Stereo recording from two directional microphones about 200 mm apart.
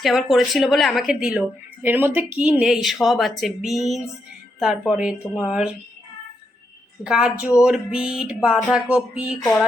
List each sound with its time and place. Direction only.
0.0 s speech: centre (ahead or behind)
7.0 s speech: 5° right (ahead or behind)